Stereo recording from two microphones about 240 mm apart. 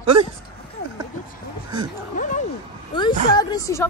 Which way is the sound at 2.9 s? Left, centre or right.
Centre.